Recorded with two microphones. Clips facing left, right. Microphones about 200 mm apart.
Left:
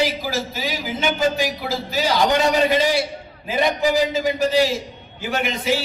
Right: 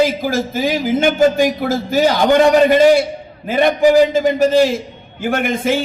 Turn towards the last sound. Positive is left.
turn(degrees=-50)  # may be behind; listen again after turning